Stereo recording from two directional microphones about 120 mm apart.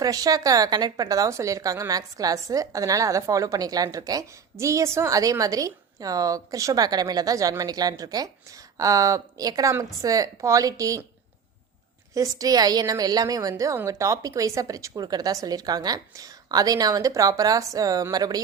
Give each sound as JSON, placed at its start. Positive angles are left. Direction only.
{"t": 0.0, "sound": "a woman's voice", "side_deg": -30}
{"t": 12.1, "sound": "a woman's voice", "side_deg": -30}